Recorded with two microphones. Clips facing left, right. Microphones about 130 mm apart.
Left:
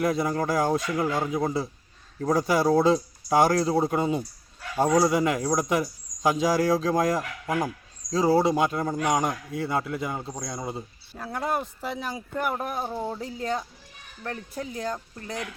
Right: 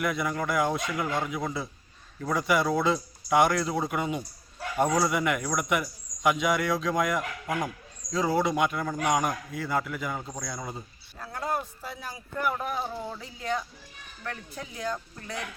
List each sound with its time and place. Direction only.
0.0 s a man's voice: 30° left (ahead or behind)
11.3 s speech: 65° left (ahead or behind)
12.5 s speech: 40° left (ahead or behind)